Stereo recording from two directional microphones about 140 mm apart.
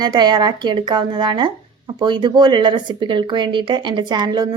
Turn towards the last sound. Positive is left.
turn(degrees=-30)  # may be behind; listen again after turning